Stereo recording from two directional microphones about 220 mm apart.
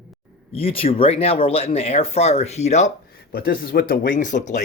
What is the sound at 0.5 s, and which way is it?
Speech, 25° left (ahead or behind).